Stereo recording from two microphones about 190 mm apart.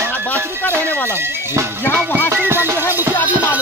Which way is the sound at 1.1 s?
10° right (ahead or behind).